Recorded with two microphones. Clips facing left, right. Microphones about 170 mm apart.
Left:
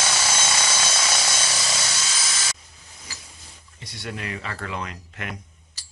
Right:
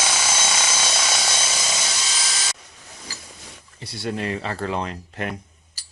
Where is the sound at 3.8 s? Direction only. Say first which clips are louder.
Right 7 dB; 30° right (ahead or behind).